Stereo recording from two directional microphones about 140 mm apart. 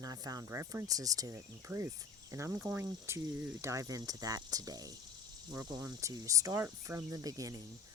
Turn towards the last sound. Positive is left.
turn(degrees=-25)  # may be behind; listen again after turning